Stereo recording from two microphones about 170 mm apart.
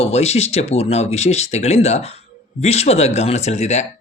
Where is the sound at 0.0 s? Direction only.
40° left (ahead or behind).